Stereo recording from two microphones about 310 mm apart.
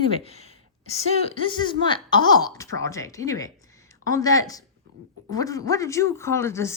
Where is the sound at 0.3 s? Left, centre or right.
Centre.